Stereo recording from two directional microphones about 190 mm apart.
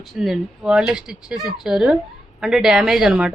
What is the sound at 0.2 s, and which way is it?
Speech, 5° right (ahead or behind).